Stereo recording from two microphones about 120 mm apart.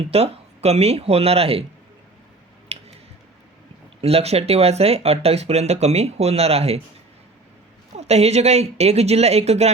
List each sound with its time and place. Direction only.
0.1 s speech: 60° right (ahead or behind)
2.7 s clicking: 55° right (ahead or behind)
4.0 s speech: 60° right (ahead or behind)
7.9 s speech: 65° right (ahead or behind)